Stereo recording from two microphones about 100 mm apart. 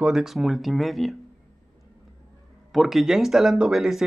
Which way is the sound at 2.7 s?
Centre (ahead or behind).